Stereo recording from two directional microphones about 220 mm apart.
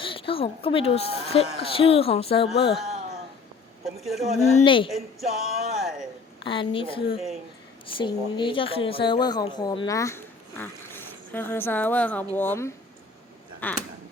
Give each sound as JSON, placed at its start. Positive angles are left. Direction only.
{"t": 0.0, "sound": "a woman's voice", "side_deg": 25}
{"t": 3.8, "sound": "speech", "side_deg": 0}
{"t": 4.5, "sound": "a woman's voice", "side_deg": 25}
{"t": 4.9, "sound": "speech", "side_deg": 0}
{"t": 6.4, "sound": "a woman's voice", "side_deg": 25}